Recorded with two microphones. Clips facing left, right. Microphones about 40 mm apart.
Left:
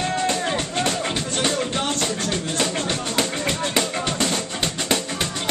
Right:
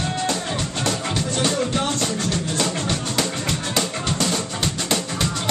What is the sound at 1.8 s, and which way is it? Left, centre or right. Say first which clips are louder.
Music: right 1 dB; left.